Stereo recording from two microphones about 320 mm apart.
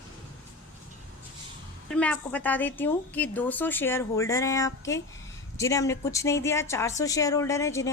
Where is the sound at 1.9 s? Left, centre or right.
Centre.